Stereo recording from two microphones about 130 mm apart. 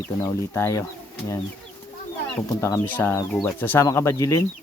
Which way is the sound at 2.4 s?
20° left (ahead or behind).